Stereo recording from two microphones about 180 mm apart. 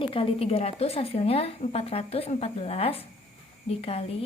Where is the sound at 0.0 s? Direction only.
30° left (ahead or behind).